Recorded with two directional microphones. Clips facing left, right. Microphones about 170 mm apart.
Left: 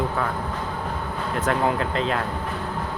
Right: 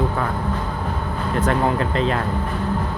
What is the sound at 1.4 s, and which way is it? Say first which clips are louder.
Speech: right 3 dB; centre (ahead or behind).